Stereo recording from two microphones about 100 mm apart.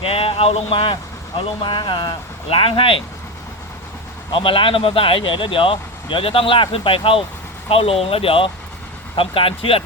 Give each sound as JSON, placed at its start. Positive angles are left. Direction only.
{"t": 0.0, "sound": "speech", "side_deg": 70}
{"t": 4.3, "sound": "speech", "side_deg": 60}